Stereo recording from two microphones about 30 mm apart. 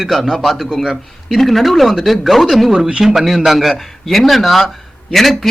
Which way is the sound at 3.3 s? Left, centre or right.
Centre.